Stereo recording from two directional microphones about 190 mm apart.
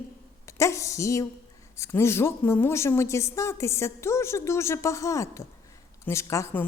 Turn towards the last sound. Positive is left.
turn(degrees=15)  # may be behind; listen again after turning